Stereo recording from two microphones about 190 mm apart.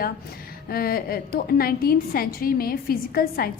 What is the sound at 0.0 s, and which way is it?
A woman's voice, 50° left (ahead or behind).